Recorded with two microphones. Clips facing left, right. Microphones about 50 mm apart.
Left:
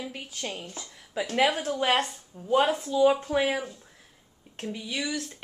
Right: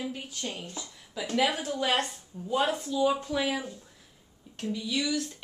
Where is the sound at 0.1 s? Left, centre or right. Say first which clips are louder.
Left 1 dB; left.